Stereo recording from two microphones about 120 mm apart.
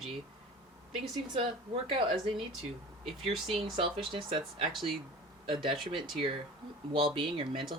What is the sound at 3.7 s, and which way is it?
Speech, 45° right (ahead or behind).